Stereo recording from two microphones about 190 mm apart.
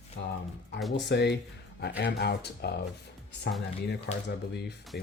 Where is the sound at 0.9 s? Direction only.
65° left (ahead or behind).